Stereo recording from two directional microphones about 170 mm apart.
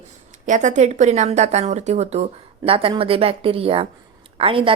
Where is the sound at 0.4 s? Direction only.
45° right (ahead or behind).